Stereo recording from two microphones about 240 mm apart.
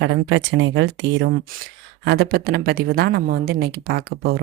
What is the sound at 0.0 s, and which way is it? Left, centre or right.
A woman's voice, right.